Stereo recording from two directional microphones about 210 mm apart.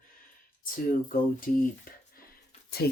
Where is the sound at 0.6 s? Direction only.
40° left (ahead or behind).